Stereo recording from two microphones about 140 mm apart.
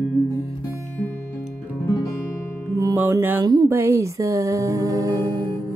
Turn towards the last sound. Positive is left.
turn(degrees=-25)  # may be behind; listen again after turning